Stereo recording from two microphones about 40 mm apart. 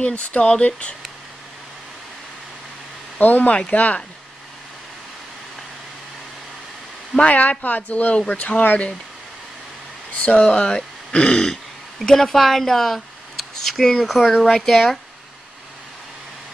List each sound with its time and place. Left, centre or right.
0.0 s speech: left
3.2 s speech: left
7.2 s speech: left
10.1 s speech: left
10.7 s speech: left
12.1 s speech: centre
14.5 s speech: centre